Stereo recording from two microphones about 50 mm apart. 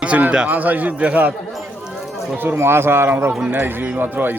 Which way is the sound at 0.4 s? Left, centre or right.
Right.